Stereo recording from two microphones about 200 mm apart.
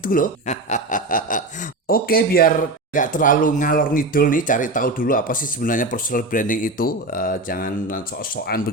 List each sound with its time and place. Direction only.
0.0 s speech: 45° left (ahead or behind)